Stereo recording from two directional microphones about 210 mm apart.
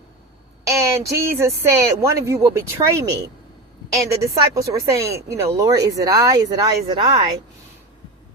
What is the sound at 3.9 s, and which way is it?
A woman's voice, 15° right (ahead or behind).